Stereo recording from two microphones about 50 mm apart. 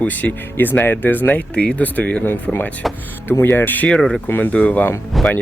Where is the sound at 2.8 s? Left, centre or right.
Centre.